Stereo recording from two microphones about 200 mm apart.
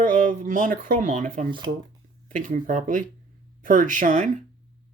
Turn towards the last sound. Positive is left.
turn(degrees=-40)  # may be behind; listen again after turning